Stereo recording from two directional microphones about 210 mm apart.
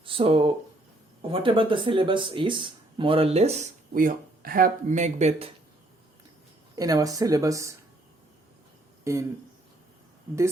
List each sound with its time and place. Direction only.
0.0 s speech: 25° right (ahead or behind)
6.7 s speech: 15° right (ahead or behind)
9.1 s speech: 15° right (ahead or behind)